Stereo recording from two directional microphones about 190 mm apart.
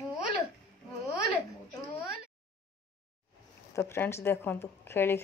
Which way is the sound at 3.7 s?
15° left (ahead or behind).